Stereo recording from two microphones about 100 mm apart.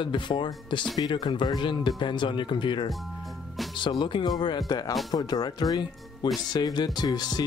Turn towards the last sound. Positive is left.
turn(degrees=45)  # may be behind; listen again after turning